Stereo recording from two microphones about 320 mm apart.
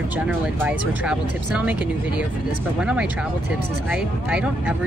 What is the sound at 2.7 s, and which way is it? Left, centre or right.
Speech, centre.